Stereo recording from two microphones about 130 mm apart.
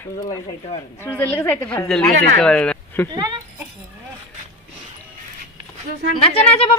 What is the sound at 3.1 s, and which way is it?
Speech, 35° right (ahead or behind).